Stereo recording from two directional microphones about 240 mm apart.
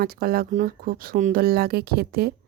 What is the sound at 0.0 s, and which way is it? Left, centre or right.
Speech, right.